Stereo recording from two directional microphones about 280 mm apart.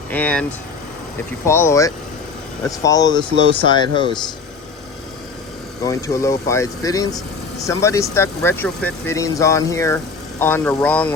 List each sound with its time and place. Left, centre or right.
0.1 s speech: centre
1.5 s speech: centre
5.8 s speech: centre